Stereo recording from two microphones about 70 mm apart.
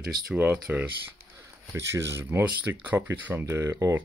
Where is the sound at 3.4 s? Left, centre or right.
Right.